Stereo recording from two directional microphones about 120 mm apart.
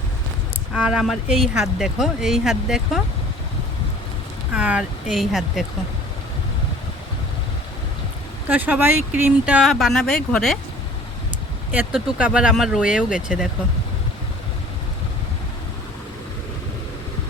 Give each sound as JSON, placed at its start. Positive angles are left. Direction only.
{"t": 0.7, "sound": "speech", "side_deg": -5}
{"t": 4.5, "sound": "speech", "side_deg": -10}
{"t": 8.4, "sound": "speech", "side_deg": -15}
{"t": 9.6, "sound": "speech", "side_deg": 0}
{"t": 11.7, "sound": "speech", "side_deg": -10}